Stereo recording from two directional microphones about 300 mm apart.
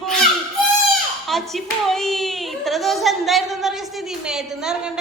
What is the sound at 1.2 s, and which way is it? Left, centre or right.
A woman's voice, centre.